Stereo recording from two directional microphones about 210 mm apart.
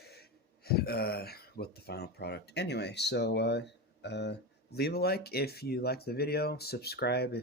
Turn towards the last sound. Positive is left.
turn(degrees=50)  # may be behind; listen again after turning